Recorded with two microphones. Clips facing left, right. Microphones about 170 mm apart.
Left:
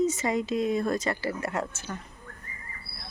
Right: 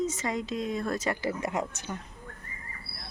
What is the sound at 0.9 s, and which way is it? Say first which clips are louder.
Speech: left 1 dB; 10° right (ahead or behind).